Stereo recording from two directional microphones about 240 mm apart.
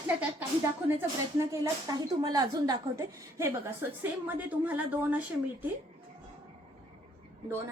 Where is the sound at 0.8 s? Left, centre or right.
Centre.